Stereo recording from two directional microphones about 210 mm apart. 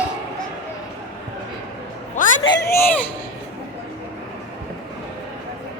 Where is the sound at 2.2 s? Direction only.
35° left (ahead or behind).